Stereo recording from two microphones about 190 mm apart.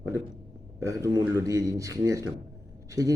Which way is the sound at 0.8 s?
15° right (ahead or behind).